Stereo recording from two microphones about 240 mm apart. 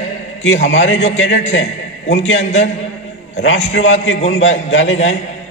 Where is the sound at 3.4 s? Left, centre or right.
Left.